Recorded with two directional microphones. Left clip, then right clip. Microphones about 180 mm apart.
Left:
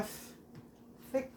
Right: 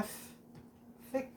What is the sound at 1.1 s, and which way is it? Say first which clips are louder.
Speech: left 2 dB; 25° left (ahead or behind).